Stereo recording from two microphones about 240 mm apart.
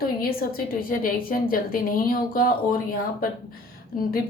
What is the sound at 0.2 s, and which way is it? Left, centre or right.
A woman's voice, left.